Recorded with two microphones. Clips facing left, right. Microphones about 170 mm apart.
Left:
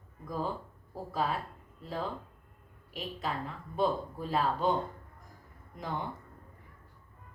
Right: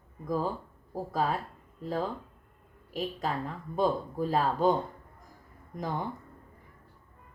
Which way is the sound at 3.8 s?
40° right (ahead or behind).